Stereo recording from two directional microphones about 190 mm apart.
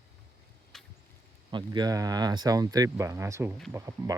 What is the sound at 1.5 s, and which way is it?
Speech, 25° right (ahead or behind).